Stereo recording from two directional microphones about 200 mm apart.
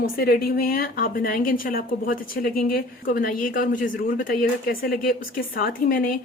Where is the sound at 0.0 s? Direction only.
50° left (ahead or behind).